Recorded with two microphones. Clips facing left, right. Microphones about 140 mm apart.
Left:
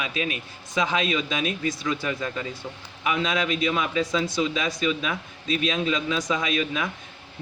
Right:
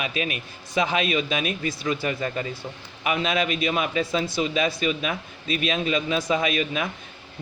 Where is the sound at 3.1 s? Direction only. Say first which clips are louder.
Right 1 dB; 60° right (ahead or behind).